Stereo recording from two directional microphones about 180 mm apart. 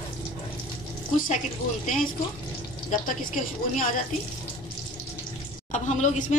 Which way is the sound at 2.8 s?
45° left (ahead or behind).